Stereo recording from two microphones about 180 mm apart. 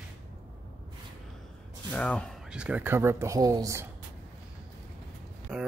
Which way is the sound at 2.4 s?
5° right (ahead or behind).